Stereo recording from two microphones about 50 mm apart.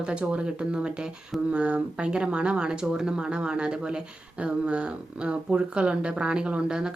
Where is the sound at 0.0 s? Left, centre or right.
Right.